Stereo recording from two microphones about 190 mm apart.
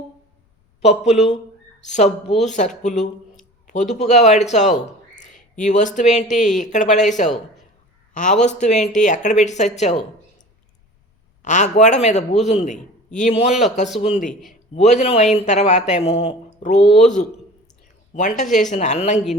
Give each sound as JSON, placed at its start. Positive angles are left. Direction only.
{"t": 0.8, "sound": "a man's voice", "side_deg": 35}
{"t": 11.4, "sound": "a man's voice", "side_deg": 40}
{"t": 14.2, "sound": "a man's voice", "side_deg": 0}
{"t": 14.8, "sound": "a man's voice", "side_deg": 35}